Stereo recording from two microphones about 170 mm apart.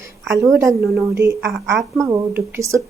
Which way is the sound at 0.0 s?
15° right (ahead or behind).